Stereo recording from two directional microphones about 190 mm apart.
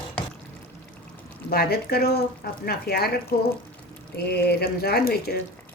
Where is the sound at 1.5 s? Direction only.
55° left (ahead or behind).